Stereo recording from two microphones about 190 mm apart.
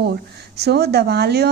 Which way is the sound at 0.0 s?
60° right (ahead or behind).